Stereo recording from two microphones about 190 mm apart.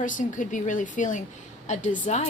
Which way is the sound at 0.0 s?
45° left (ahead or behind).